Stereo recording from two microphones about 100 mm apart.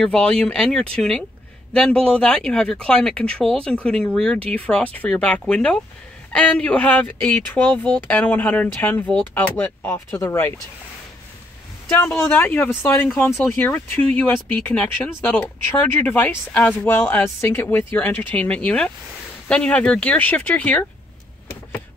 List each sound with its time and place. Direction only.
0.0 s speech: 10° left (ahead or behind); by 10.5 s 25° left (ahead or behind)
11.9 s speech: 25° left (ahead or behind)